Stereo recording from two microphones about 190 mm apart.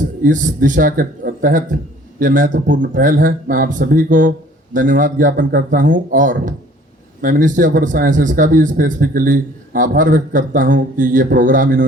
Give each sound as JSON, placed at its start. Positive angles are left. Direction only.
{"t": 0.2, "sound": "speech", "side_deg": -45}